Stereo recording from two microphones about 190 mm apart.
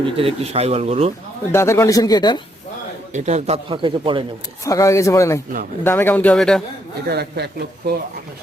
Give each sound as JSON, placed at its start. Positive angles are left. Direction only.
{"t": 0.2, "sound": "speech", "side_deg": -30}
{"t": 1.5, "sound": "speech", "side_deg": 15}
{"t": 3.1, "sound": "speech", "side_deg": -35}
{"t": 4.6, "sound": "a man's voice", "side_deg": 15}
{"t": 7.1, "sound": "a man's voice", "side_deg": -60}